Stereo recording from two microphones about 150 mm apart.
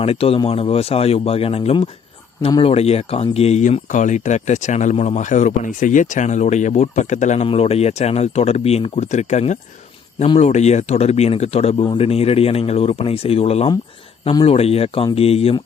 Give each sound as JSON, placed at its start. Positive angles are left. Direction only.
{"t": 0.0, "sound": "speech", "side_deg": 40}